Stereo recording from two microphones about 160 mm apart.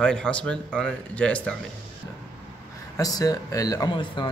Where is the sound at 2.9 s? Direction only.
20° left (ahead or behind).